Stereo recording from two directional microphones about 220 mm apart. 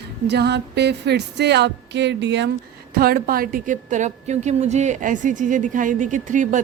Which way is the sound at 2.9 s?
45° right (ahead or behind).